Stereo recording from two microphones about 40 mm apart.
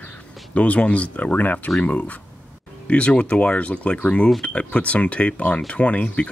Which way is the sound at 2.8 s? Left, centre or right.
Left.